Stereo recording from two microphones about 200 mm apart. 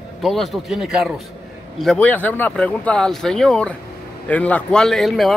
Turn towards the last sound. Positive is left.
turn(degrees=0)  # may be behind; listen again after turning